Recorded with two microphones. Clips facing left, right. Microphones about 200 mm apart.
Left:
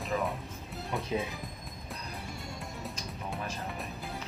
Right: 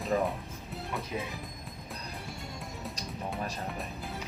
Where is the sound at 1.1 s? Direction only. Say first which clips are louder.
Left 5 dB; 25° left (ahead or behind).